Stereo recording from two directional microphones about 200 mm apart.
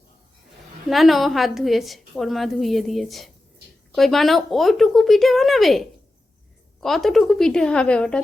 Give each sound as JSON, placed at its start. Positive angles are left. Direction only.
{"t": 0.9, "sound": "a woman's voice", "side_deg": 0}